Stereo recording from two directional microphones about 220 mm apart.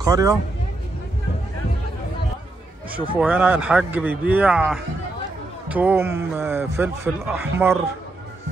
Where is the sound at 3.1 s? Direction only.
5° right (ahead or behind).